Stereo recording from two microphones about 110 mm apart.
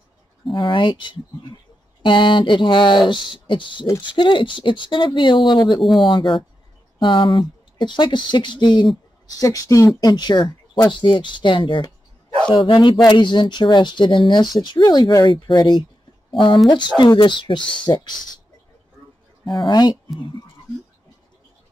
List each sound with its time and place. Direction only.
0.5 s speech: 50° left (ahead or behind)
5.8 s speech: centre (ahead or behind)
6.0 s speech: 50° left (ahead or behind)
9.3 s speech: 30° left (ahead or behind)
19.5 s speech: 40° left (ahead or behind)